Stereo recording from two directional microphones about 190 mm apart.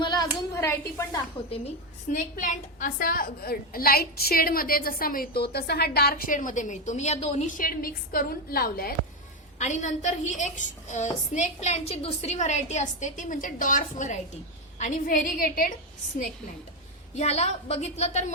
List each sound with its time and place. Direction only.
0.0 s a sound: 20° left (ahead or behind)
0.5 s a woman's voice: 15° left (ahead or behind)
2.1 s a woman's voice: 45° left (ahead or behind)
9.6 s a woman's voice: 40° left (ahead or behind)
17.2 s a woman's voice: 35° left (ahead or behind)